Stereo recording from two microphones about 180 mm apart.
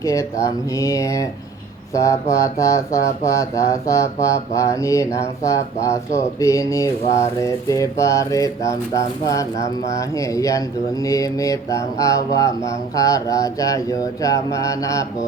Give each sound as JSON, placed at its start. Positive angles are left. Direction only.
{"t": 0.0, "sound": "speech", "side_deg": 20}
{"t": 11.0, "sound": "mantra", "side_deg": 20}